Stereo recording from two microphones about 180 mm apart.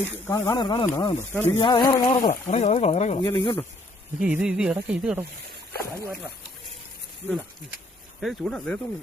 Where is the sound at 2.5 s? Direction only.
35° left (ahead or behind).